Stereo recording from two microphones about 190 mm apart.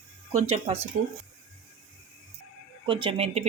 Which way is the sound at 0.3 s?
35° right (ahead or behind).